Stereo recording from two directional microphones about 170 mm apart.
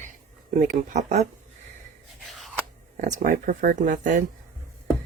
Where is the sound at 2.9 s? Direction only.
50° right (ahead or behind).